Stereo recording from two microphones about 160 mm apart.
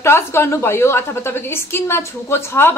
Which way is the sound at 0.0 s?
15° left (ahead or behind).